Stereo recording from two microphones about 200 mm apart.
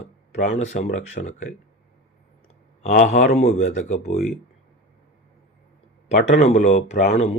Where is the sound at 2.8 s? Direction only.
35° left (ahead or behind).